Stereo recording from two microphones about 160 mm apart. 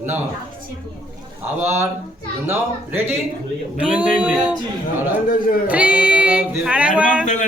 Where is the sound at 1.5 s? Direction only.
15° right (ahead or behind).